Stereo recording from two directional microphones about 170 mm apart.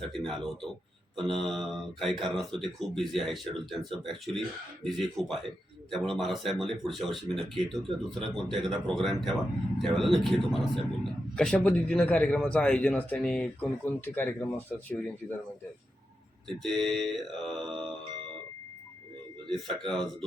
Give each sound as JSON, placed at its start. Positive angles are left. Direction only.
{"t": 0.1, "sound": "a man's voice", "side_deg": 0}
{"t": 16.5, "sound": "a man's voice", "side_deg": 0}
{"t": 19.5, "sound": "a man's voice", "side_deg": 5}